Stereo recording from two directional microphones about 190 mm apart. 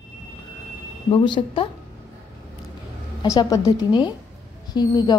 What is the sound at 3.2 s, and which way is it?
A woman's voice, 20° left (ahead or behind).